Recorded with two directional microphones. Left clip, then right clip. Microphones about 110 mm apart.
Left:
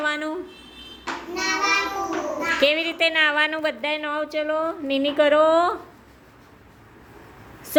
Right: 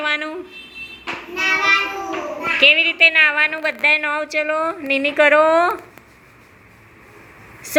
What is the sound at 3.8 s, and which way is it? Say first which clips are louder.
A woman's voice: right 8 dB; 5° left (ahead or behind).